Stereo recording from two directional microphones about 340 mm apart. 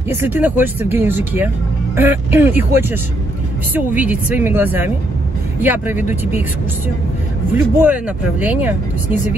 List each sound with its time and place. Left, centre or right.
0.1 s speech: centre
7.5 s speech: centre